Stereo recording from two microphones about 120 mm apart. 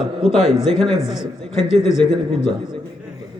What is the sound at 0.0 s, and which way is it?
Speech, 5° right (ahead or behind).